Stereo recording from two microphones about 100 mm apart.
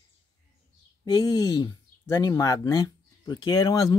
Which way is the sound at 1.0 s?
40° left (ahead or behind).